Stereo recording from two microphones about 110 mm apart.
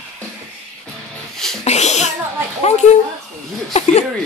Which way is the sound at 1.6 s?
90° left.